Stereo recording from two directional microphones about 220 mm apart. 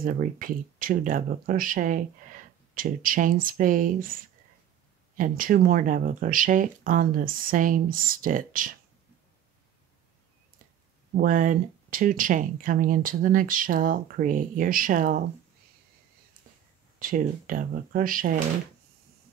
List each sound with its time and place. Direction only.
0.0 s speech: 40° right (ahead or behind)
5.1 s speech: 40° right (ahead or behind)
11.1 s speech: 35° right (ahead or behind)
17.0 s speech: 40° right (ahead or behind)